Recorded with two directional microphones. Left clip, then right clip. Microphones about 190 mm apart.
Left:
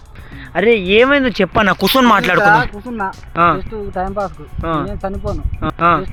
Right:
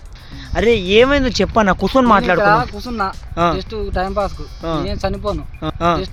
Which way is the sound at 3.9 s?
25° right (ahead or behind).